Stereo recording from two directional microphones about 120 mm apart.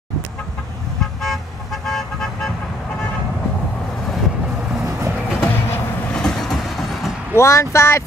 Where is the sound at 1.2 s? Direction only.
Centre (ahead or behind).